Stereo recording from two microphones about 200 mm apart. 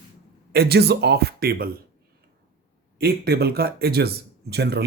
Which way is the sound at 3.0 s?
50° right (ahead or behind).